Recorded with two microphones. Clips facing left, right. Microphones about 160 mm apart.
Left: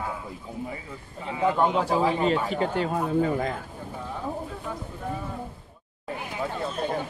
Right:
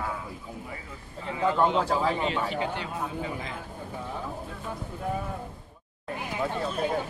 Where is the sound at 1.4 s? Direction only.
15° left (ahead or behind).